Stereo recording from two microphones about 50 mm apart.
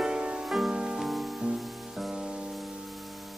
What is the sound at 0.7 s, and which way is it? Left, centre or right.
Music, centre.